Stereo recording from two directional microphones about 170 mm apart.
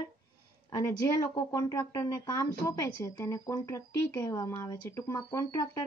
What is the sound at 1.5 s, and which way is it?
Speech, 20° left (ahead or behind).